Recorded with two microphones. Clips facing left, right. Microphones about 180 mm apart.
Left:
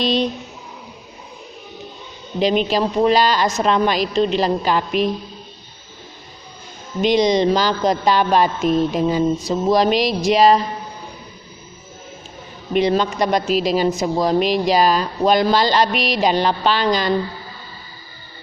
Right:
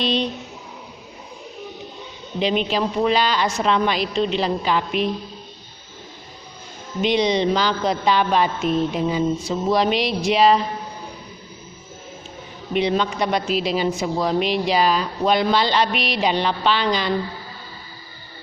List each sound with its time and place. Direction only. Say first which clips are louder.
0.0 s speech: left 3 dB; 40° left (ahead or behind)
2.4 s speech: left 3 dB; 40° left (ahead or behind)
7.0 s speech: left 4 dB; 40° left (ahead or behind)
12.7 s speech: left 3 dB; 40° left (ahead or behind)